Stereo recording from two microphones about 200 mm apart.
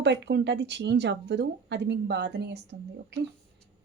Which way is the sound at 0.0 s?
60° right (ahead or behind).